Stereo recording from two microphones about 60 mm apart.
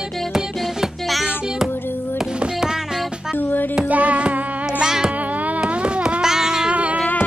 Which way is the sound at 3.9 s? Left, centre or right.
Right.